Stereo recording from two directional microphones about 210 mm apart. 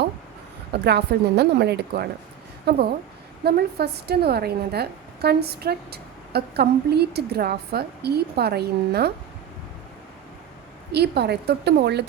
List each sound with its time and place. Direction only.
0.7 s a woman's voice: 50° right (ahead or behind)
10.9 s a woman's voice: 50° right (ahead or behind)